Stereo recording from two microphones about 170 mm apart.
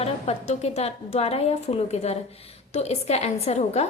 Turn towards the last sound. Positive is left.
turn(degrees=40)  # may be behind; listen again after turning